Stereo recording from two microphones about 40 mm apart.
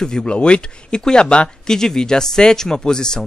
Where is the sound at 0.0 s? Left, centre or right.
Centre.